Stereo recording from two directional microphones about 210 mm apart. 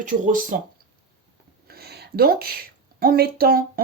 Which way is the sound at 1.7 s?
50° right (ahead or behind).